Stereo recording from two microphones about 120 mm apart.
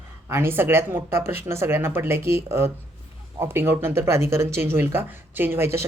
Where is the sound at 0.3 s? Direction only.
20° right (ahead or behind).